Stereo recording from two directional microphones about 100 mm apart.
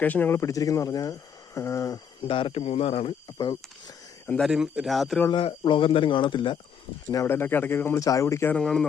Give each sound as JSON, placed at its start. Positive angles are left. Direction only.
{"t": 0.0, "sound": "speech", "side_deg": 15}
{"t": 0.3, "sound": "speech", "side_deg": 35}
{"t": 2.2, "sound": "speech", "side_deg": 65}
{"t": 4.4, "sound": "speech", "side_deg": -5}
{"t": 5.3, "sound": "speech", "side_deg": 60}
{"t": 7.1, "sound": "speech", "side_deg": 25}
{"t": 8.0, "sound": "speech", "side_deg": 35}
{"t": 8.5, "sound": "speech", "side_deg": 5}